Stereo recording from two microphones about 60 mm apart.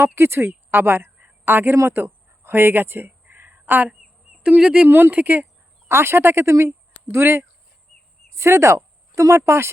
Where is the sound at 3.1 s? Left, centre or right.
Right.